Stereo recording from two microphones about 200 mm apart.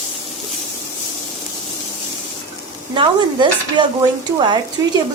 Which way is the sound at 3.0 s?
25° right (ahead or behind).